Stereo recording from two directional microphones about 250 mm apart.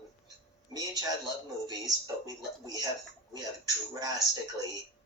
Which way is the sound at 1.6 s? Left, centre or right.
Centre.